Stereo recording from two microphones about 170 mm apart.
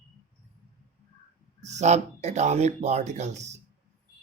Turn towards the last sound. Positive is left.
turn(degrees=-40)  # may be behind; listen again after turning